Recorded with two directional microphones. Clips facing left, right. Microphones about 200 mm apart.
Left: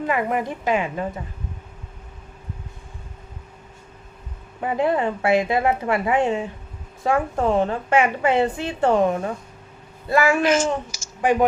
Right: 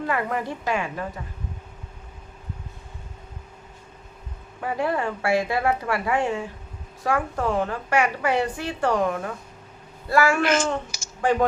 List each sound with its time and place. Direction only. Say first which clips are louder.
0.0 s a woman's voice: left 3 dB; 15° left (ahead or behind)
4.6 s a woman's voice: left 4 dB; 20° left (ahead or behind)